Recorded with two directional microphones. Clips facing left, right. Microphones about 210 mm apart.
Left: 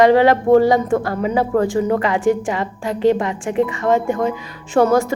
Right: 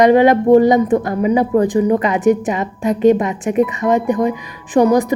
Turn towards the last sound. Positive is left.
turn(degrees=-15)  # may be behind; listen again after turning